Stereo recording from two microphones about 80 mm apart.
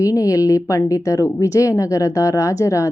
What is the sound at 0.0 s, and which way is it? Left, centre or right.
A woman's voice, left.